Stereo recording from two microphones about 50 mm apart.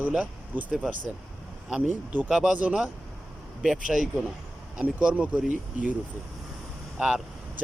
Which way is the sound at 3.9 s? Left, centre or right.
Right.